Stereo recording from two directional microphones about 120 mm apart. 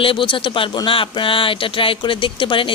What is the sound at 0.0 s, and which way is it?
Speech, 45° left (ahead or behind).